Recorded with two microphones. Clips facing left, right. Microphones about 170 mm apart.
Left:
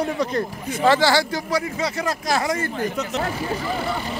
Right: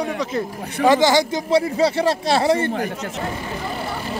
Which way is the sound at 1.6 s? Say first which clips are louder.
Right 7 dB; 30° right (ahead or behind).